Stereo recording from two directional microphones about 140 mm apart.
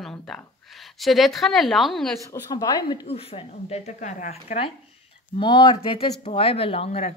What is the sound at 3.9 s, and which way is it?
Speech, 60° left (ahead or behind).